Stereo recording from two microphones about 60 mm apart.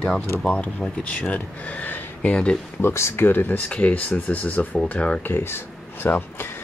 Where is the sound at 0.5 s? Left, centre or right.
Left.